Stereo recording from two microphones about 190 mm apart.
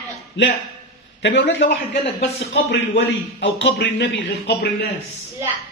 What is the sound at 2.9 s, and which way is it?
Speech, 70° left (ahead or behind).